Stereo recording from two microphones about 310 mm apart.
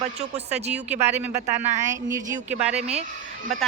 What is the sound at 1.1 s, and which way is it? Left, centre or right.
Speech, centre.